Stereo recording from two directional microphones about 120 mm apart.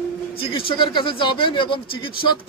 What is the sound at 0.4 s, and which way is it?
A man's voice, 45° left (ahead or behind).